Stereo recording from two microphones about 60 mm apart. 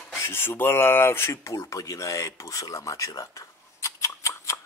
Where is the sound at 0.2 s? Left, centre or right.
Left.